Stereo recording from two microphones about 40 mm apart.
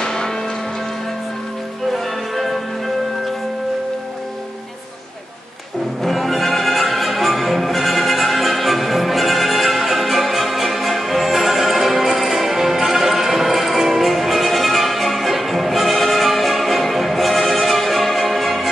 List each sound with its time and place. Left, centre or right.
0.0 s music: centre
1.9 s music: centre
6.0 s music: centre